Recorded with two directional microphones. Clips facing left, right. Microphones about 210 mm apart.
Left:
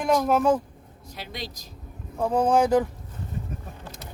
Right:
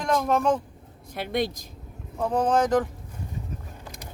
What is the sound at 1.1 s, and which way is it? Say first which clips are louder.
Speech: right 10 dB; 55° right (ahead or behind).